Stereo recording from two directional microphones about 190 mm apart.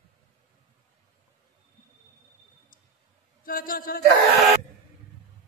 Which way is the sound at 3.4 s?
50° left (ahead or behind).